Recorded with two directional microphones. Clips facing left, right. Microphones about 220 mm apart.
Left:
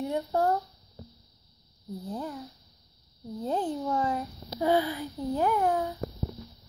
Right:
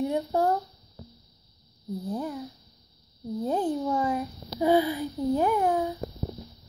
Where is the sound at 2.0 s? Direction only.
10° right (ahead or behind).